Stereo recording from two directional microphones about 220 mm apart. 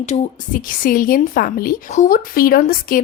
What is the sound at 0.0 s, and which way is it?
A woman's voice, 35° left (ahead or behind).